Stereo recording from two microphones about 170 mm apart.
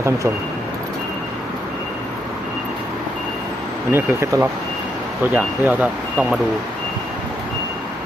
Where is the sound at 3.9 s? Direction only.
15° right (ahead or behind).